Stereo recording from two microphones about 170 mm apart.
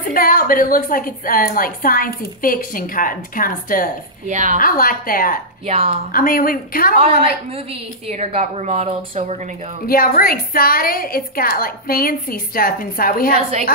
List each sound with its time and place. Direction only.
0.0 s a woman's voice: 55° left (ahead or behind)
4.3 s a woman's voice: 45° right (ahead or behind)
4.6 s a woman's voice: 55° left (ahead or behind)
5.7 s a woman's voice: 40° right (ahead or behind)
6.1 s a woman's voice: 55° left (ahead or behind)
8.1 s a woman's voice: 40° right (ahead or behind)
9.8 s a woman's voice: 60° left (ahead or behind)